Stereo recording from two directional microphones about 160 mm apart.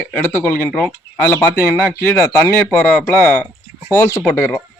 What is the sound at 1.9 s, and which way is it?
Speech, 20° left (ahead or behind).